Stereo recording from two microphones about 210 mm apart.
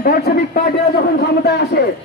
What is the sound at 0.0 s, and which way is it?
A man's voice, 45° left (ahead or behind).